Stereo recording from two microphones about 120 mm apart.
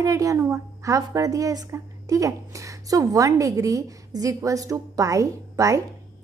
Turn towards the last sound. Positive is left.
turn(degrees=-25)  # may be behind; listen again after turning